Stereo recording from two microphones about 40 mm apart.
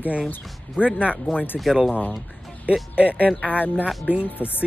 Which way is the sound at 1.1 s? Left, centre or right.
Left.